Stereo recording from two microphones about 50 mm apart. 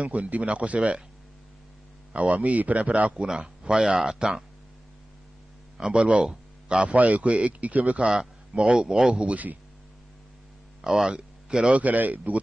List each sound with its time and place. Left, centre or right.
0.0 s speech: right
2.1 s speech: right; by 4.5 s centre
5.8 s a man's voice: centre
8.1 s speech: centre
9.2 s speech: right
10.8 s speech: centre; by 12.2 s right